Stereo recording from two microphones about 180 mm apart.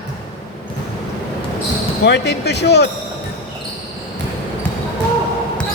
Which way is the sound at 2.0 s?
70° left (ahead or behind).